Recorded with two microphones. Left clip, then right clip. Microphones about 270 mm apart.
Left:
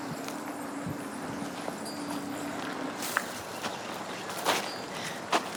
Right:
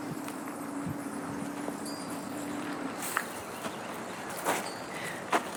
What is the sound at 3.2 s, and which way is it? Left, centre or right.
Walk, left.